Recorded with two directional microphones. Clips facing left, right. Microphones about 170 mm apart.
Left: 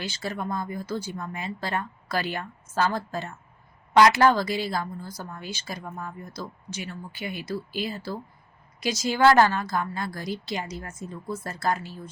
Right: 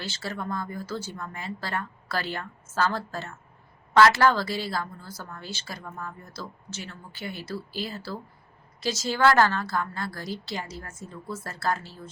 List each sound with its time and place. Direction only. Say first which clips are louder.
0.0 s a woman's voice: left 2 dB; 15° left (ahead or behind)